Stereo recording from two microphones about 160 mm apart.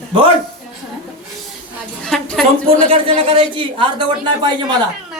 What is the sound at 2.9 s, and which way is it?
Speech, 35° right (ahead or behind).